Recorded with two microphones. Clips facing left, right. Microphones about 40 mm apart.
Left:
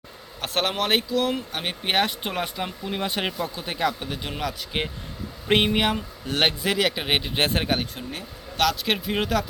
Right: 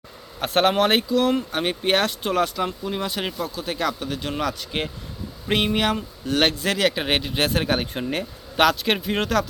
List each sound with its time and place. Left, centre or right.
0.3 s speech: centre
3.0 s speech: left; by 7.3 s centre
7.3 s speech: left
8.0 s speech: right
8.7 s speech: centre